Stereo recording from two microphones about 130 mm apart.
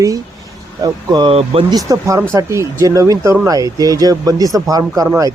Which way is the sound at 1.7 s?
25° right (ahead or behind).